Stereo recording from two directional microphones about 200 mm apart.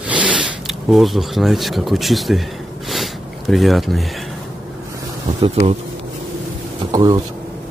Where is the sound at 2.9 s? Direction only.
Centre (ahead or behind).